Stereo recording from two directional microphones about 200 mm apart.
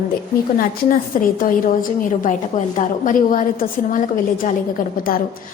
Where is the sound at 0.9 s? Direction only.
45° left (ahead or behind).